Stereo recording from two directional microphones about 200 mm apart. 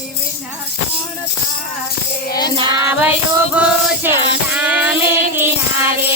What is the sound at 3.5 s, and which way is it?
Music, 10° right (ahead or behind).